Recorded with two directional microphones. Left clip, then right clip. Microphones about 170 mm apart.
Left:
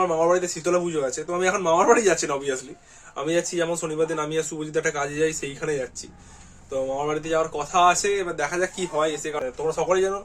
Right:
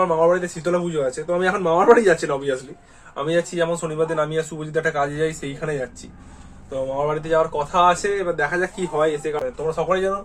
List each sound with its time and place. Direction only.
0.0 s speech: 20° left (ahead or behind)
7.1 s speech: 20° left (ahead or behind)